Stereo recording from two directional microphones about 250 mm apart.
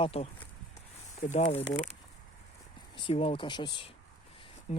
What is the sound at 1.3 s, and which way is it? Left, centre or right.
Speech, left.